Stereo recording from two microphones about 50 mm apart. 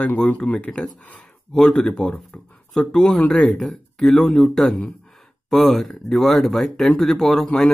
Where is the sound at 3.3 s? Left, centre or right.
Centre.